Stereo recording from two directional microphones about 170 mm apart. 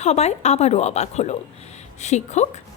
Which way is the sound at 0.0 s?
40° left (ahead or behind).